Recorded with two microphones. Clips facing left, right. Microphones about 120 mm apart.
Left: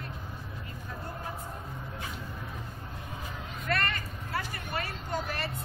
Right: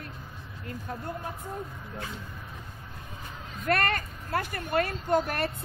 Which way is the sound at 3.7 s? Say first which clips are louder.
Right 5 dB; 55° right (ahead or behind).